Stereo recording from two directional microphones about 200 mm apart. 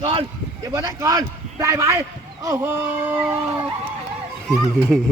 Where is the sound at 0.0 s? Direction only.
30° right (ahead or behind).